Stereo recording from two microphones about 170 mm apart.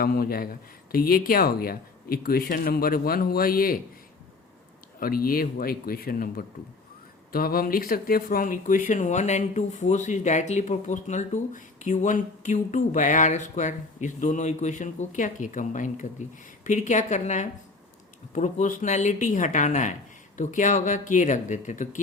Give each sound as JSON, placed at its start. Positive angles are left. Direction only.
{"t": 0.0, "sound": "speech", "side_deg": 60}
{"t": 4.9, "sound": "speech", "side_deg": 60}